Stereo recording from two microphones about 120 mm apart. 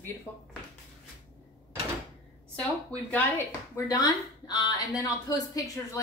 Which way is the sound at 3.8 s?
35° left (ahead or behind).